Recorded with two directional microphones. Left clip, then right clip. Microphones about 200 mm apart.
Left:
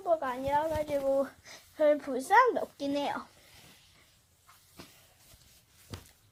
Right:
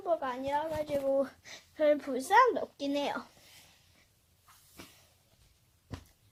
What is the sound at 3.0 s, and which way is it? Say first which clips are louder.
Speech: left 1 dB; 20° right (ahead or behind).